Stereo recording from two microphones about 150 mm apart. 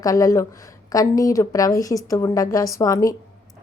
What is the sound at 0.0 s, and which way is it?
A woman's voice, 25° left (ahead or behind).